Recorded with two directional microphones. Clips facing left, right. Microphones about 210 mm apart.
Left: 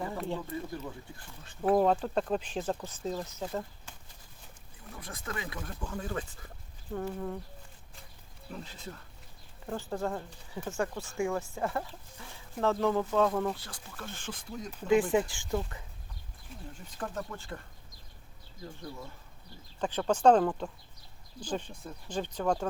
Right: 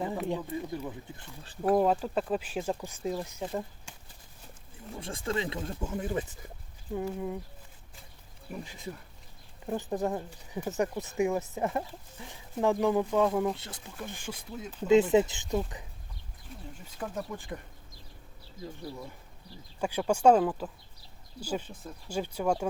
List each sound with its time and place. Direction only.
0.3 s speech: 15° right (ahead or behind)
1.7 s speech: 5° right (ahead or behind)
4.9 s speech: 25° right (ahead or behind); by 7.3 s 10° right (ahead or behind)
8.4 s speech: 15° right (ahead or behind)
13.6 s speech: 20° right (ahead or behind)
15.1 s speech: 20° right (ahead or behind)
17.0 s speech: 10° right (ahead or behind)
19.8 s speech: 10° right (ahead or behind)